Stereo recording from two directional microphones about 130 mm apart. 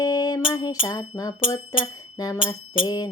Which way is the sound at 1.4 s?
35° left (ahead or behind).